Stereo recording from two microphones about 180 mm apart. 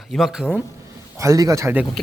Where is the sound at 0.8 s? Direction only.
15° right (ahead or behind).